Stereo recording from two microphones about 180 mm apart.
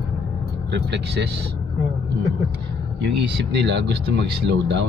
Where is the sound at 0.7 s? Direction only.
70° right (ahead or behind).